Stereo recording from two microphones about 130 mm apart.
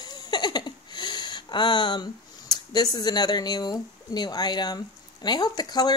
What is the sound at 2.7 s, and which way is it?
Speech, 30° left (ahead or behind).